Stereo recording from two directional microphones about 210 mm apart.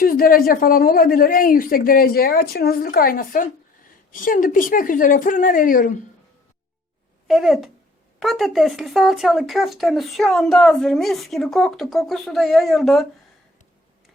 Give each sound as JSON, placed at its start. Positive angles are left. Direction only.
{"t": 0.0, "sound": "speech", "side_deg": 45}
{"t": 7.3, "sound": "speech", "side_deg": 0}